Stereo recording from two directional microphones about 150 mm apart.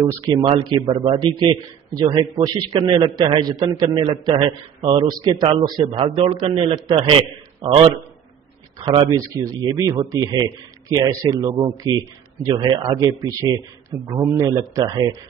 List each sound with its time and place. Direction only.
0.0 s a man's voice: 25° right (ahead or behind)
12.5 s a man's voice: 35° right (ahead or behind)